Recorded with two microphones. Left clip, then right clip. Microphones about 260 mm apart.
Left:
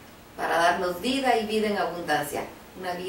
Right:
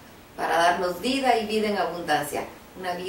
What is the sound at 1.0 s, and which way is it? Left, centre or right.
Speech, centre.